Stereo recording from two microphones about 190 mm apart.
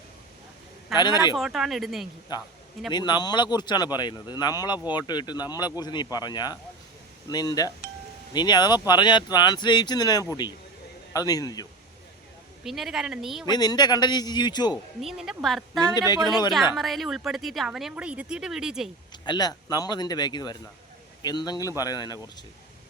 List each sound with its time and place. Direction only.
0.9 s speech: 20° left (ahead or behind)
1.4 s a woman's voice: centre (ahead or behind)
2.3 s speech: 20° left (ahead or behind)
12.6 s a woman's voice: centre (ahead or behind)
13.4 s speech: 20° left (ahead or behind)
15.0 s a woman's voice: 5° right (ahead or behind)
16.0 s speech: 20° left (ahead or behind)
16.7 s a woman's voice: centre (ahead or behind)
19.1 s speech: 25° left (ahead or behind)